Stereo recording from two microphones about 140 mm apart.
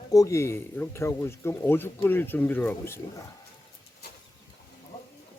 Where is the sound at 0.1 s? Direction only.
25° left (ahead or behind).